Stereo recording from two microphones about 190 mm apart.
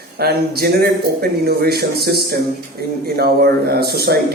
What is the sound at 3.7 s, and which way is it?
Speech, 55° right (ahead or behind).